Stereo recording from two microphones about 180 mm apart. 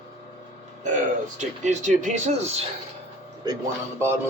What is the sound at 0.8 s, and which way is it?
Speech, 45° right (ahead or behind).